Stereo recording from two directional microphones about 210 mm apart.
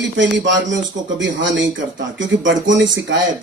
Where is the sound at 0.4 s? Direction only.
60° right (ahead or behind).